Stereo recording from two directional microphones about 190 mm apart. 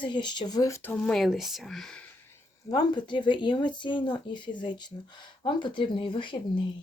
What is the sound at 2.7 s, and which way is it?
Speech, 20° left (ahead or behind).